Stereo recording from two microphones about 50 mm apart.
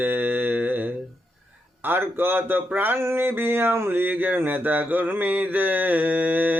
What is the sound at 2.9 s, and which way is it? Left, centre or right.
Speech, right.